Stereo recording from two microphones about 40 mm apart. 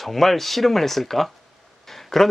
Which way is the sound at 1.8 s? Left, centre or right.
Centre.